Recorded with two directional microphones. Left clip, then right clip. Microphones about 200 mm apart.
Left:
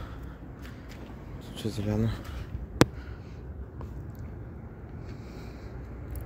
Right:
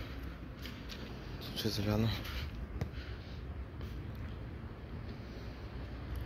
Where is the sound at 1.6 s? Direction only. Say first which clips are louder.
Left 3 dB; 25° left (ahead or behind).